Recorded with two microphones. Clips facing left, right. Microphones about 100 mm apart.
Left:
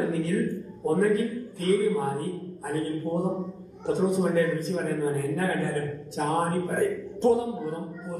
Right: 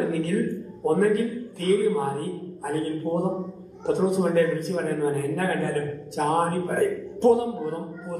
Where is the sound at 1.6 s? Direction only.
Centre (ahead or behind).